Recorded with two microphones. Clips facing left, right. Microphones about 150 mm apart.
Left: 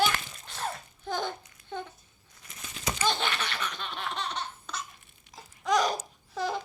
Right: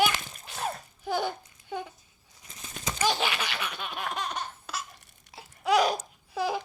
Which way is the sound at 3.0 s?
10° right (ahead or behind).